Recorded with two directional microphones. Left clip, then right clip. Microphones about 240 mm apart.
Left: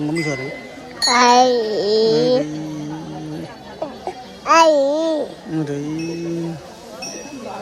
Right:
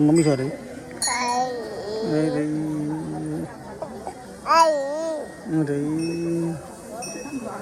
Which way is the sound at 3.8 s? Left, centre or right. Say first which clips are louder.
Left 7 dB; left.